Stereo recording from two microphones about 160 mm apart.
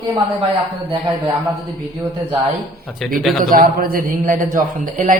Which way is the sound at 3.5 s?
65° right (ahead or behind).